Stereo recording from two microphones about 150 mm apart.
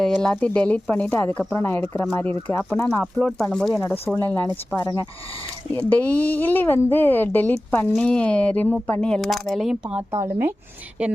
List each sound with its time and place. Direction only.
0.2 s speech: 5° left (ahead or behind); by 5.0 s 20° left (ahead or behind)
5.7 s speech: 10° left (ahead or behind)
10.1 s speech: 15° right (ahead or behind)